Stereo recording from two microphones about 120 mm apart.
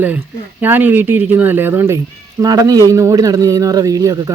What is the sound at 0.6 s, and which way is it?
Speech, 15° right (ahead or behind).